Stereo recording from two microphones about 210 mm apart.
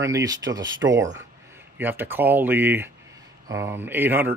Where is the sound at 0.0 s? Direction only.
15° right (ahead or behind).